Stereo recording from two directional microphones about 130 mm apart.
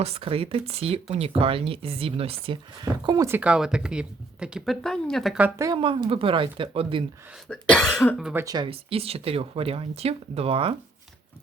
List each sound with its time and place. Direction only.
0.0 s speech: 50° right (ahead or behind)
2.8 s speech: 30° right (ahead or behind)
3.2 s speech: 10° right (ahead or behind)
5.5 s speech: 25° right (ahead or behind)
5.8 s speech: 45° right (ahead or behind)
7.4 s speech: 5° left (ahead or behind)
8.2 s speech: 15° right (ahead or behind)
8.4 s speech: 35° right (ahead or behind)
8.7 s speech: 45° right (ahead or behind)